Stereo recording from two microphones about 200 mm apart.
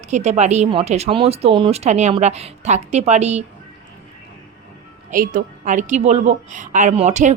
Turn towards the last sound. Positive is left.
turn(degrees=-35)  # may be behind; listen again after turning